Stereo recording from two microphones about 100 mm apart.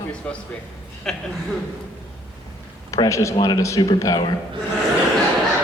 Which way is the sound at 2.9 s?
30° left (ahead or behind).